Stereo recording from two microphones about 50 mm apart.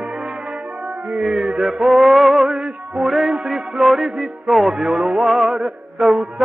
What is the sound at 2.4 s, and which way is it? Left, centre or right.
Music, centre.